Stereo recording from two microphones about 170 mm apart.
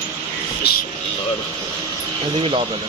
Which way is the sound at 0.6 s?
70° left (ahead or behind).